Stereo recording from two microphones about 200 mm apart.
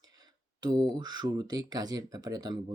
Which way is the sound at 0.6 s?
20° right (ahead or behind).